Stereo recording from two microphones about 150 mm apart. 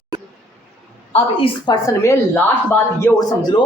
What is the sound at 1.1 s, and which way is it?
Speech, 35° left (ahead or behind).